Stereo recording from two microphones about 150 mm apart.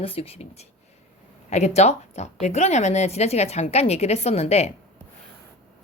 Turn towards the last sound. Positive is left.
turn(degrees=45)  # may be behind; listen again after turning